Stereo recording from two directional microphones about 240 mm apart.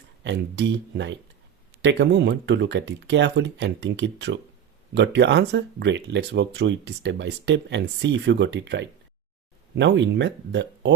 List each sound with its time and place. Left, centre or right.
0.3 s speech: right